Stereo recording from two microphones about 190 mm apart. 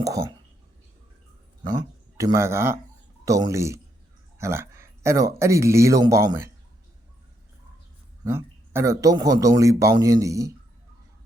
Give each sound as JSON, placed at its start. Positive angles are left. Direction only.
{"t": 0.0, "sound": "speech", "side_deg": -20}
{"t": 1.6, "sound": "speech", "side_deg": -20}
{"t": 8.2, "sound": "speech", "side_deg": -15}